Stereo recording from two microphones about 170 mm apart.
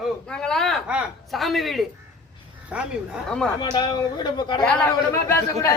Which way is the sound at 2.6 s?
5° right (ahead or behind).